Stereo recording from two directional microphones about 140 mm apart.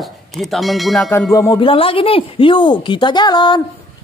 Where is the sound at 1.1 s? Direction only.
25° left (ahead or behind).